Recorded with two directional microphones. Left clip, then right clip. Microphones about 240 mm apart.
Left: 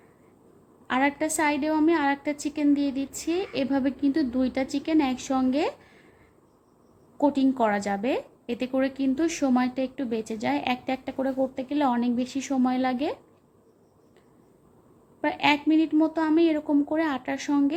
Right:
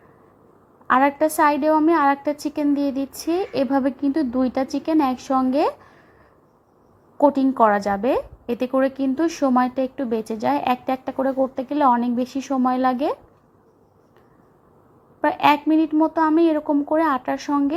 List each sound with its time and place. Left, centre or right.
0.9 s a woman's voice: centre
7.2 s a woman's voice: centre
15.2 s a woman's voice: centre